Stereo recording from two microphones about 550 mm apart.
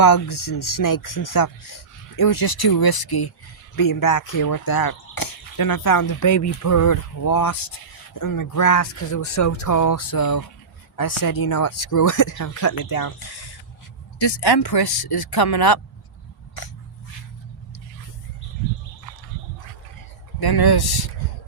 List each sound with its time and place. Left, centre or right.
0.0 s speech: left
20.4 s speech: left